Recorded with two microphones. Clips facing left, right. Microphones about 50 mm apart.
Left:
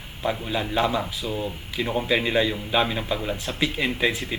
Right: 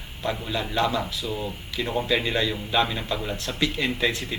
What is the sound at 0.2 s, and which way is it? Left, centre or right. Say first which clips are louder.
A man's voice: left 2 dB; centre.